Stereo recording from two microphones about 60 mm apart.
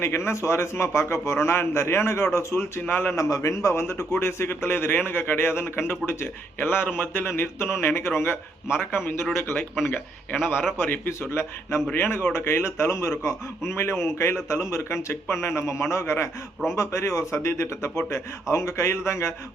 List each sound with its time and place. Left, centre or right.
0.0 s a man's voice: left
3.2 s a man's voice: left